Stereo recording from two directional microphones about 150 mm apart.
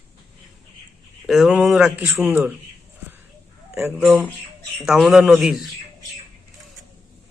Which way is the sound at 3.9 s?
10° right (ahead or behind).